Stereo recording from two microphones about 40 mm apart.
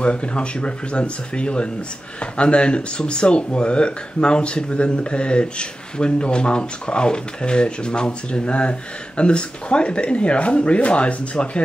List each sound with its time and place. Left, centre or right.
0.0 s speech: left